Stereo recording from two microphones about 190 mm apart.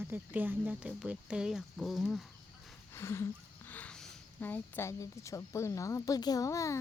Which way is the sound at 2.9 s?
15° left (ahead or behind).